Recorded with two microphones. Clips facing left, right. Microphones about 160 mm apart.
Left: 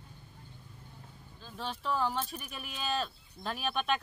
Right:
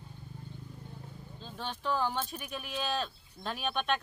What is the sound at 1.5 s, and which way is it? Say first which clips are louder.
Speech: even; centre (ahead or behind).